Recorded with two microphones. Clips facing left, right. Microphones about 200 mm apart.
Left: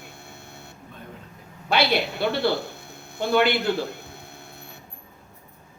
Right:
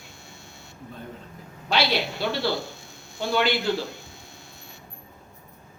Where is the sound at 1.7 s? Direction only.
55° left (ahead or behind).